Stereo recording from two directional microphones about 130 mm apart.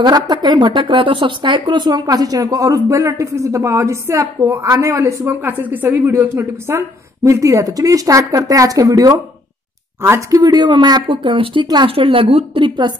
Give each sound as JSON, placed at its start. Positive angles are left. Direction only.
{"t": 0.0, "sound": "a woman's voice", "side_deg": -35}
{"t": 10.4, "sound": "speech", "side_deg": -35}